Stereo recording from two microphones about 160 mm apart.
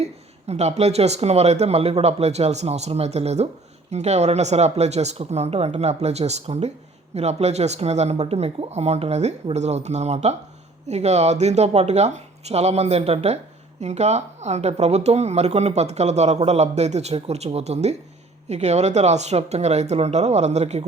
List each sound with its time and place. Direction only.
0.0 s speech: 40° right (ahead or behind)